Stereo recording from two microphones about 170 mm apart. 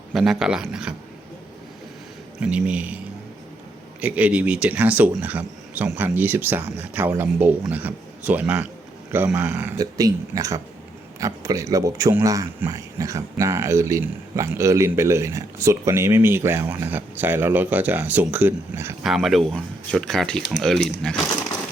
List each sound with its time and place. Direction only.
0.1 s speech: centre (ahead or behind)
2.4 s speech: 5° right (ahead or behind)
4.0 s speech: 10° right (ahead or behind)
19.0 s speech: centre (ahead or behind)